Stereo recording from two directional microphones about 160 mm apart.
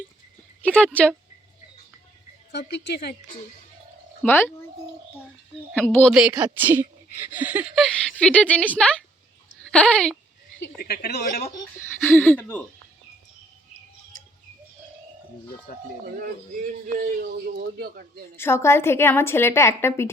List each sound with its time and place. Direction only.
0.6 s a woman's voice: 10° left (ahead or behind)
2.5 s a woman's voice: 90° left
4.2 s a woman's voice: 10° left (ahead or behind)
5.7 s speech: 10° left (ahead or behind)
8.2 s a woman's voice: 10° left (ahead or behind)
10.8 s speech: 75° left (ahead or behind)
11.5 s a woman's voice: 15° left (ahead or behind)
15.7 s speech: 70° left (ahead or behind)
17.0 s speech: 65° right (ahead or behind)
18.3 s a woman's voice: 15° left (ahead or behind)